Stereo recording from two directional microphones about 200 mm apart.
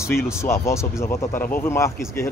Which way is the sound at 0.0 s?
15° left (ahead or behind).